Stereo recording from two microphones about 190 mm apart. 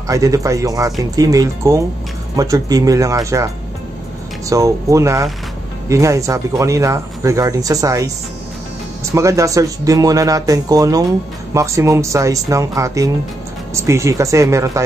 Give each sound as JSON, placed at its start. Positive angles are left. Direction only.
{"t": 0.1, "sound": "speech", "side_deg": -15}
{"t": 4.5, "sound": "speech", "side_deg": -15}
{"t": 9.1, "sound": "speech", "side_deg": -15}